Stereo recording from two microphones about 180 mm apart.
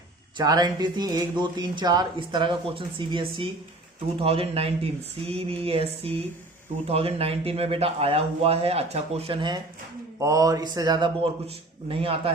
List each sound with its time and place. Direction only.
0.3 s speech: 20° right (ahead or behind)